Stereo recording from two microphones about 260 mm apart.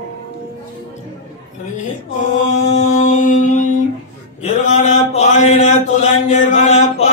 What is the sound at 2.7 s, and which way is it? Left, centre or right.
Mantra, left.